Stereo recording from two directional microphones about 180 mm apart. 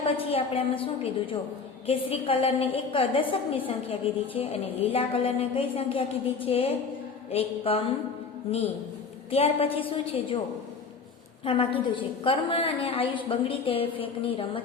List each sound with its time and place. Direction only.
0.0 s a woman's voice: 30° left (ahead or behind)
9.3 s a woman's voice: 35° left (ahead or behind)
11.4 s a woman's voice: 30° left (ahead or behind)